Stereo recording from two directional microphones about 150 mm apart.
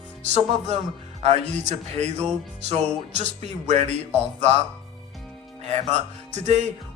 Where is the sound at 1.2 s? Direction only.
45° right (ahead or behind).